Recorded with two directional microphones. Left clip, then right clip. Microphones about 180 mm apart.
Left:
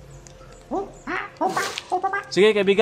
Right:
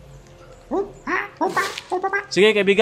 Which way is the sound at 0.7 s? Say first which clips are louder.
Right 4 dB; 10° right (ahead or behind).